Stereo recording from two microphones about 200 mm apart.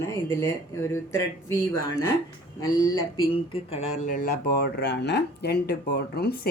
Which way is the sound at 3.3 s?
30° left (ahead or behind).